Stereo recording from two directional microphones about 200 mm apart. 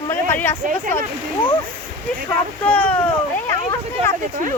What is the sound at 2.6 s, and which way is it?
Speech, 5° left (ahead or behind).